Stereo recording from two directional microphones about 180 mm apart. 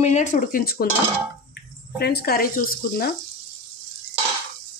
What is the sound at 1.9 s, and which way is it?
Speech, 60° left (ahead or behind).